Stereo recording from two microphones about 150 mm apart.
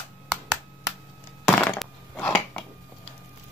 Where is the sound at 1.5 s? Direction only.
10° left (ahead or behind).